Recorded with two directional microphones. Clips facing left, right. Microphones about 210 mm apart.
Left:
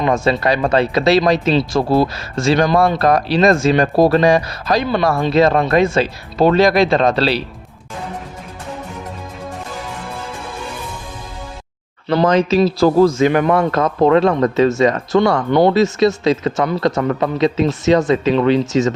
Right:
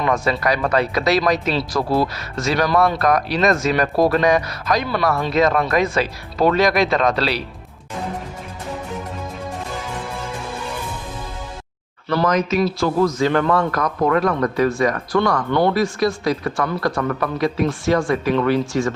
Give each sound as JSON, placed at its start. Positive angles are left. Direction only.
{"t": 0.0, "sound": "speech", "side_deg": 25}
{"t": 12.0, "sound": "speech", "side_deg": 25}
{"t": 13.2, "sound": "speech", "side_deg": 15}